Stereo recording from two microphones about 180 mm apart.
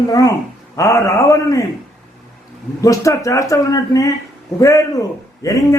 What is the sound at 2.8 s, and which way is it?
A man's voice, 20° left (ahead or behind).